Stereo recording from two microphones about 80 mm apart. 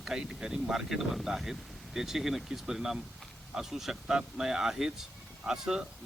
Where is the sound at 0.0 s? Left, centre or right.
Centre.